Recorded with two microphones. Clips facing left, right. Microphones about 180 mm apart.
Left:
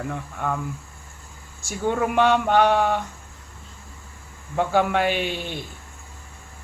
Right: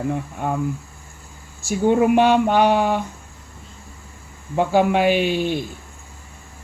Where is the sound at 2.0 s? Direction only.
15° right (ahead or behind).